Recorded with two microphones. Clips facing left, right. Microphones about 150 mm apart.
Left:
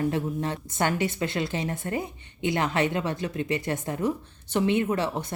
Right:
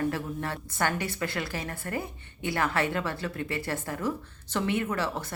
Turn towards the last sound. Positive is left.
turn(degrees=20)  # may be behind; listen again after turning